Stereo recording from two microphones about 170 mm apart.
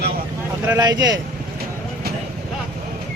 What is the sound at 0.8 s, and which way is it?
Speech, 20° right (ahead or behind).